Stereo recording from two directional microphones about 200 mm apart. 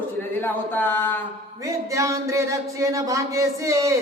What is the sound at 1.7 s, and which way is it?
Speech, 15° right (ahead or behind).